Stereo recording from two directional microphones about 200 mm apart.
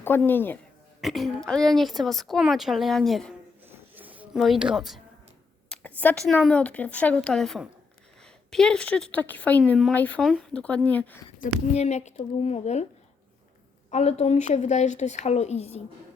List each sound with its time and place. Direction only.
0.2 s a woman's voice: 10° left (ahead or behind)
3.7 s a sound: 10° right (ahead or behind)
5.6 s a woman's voice: 5° left (ahead or behind)
11.3 s speech: 35° left (ahead or behind)
13.9 s speech: 35° left (ahead or behind)